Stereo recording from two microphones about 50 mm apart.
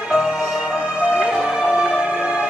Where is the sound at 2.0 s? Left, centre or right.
Centre.